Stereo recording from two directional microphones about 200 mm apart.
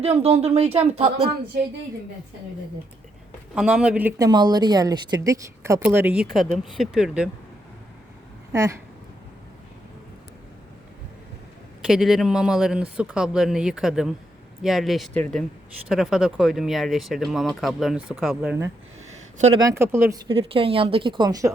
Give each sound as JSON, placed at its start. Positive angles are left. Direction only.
{"t": 0.0, "sound": "speech", "side_deg": -30}
{"t": 3.5, "sound": "speech", "side_deg": -5}
{"t": 4.2, "sound": "speech", "side_deg": -20}
{"t": 8.5, "sound": "speech", "side_deg": -15}
{"t": 11.9, "sound": "speech", "side_deg": 0}
{"t": 19.5, "sound": "speech", "side_deg": -15}
{"t": 20.2, "sound": "speech", "side_deg": -30}